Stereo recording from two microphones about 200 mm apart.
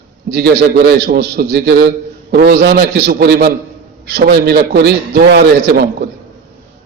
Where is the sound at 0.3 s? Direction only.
55° right (ahead or behind).